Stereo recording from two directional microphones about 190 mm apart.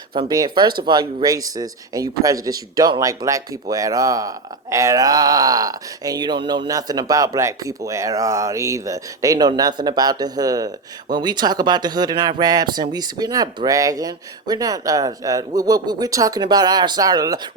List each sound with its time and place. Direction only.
0.1 s speech: 25° right (ahead or behind)